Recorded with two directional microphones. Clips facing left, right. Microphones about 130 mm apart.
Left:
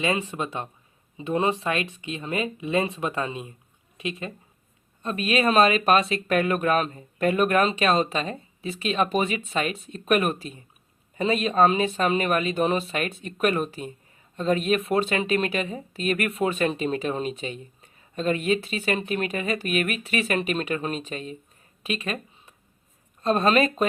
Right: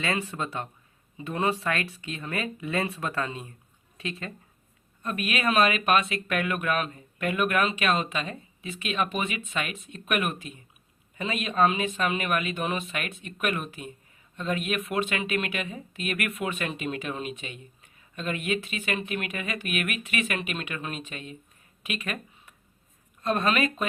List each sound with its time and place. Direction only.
0.0 s speech: 20° left (ahead or behind)
5.0 s speech: 30° left (ahead or behind)